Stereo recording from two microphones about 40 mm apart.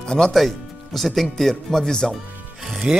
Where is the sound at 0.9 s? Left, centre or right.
Centre.